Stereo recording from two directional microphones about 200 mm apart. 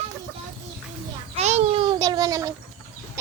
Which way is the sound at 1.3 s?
35° right (ahead or behind).